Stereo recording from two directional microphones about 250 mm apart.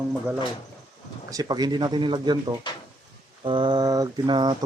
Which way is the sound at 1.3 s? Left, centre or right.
Centre.